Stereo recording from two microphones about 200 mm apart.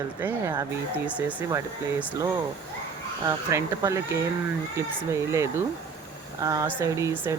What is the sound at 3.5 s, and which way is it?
Speech, 15° right (ahead or behind).